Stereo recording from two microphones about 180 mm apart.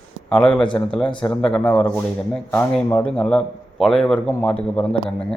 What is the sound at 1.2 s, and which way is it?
A man's voice, 5° left (ahead or behind).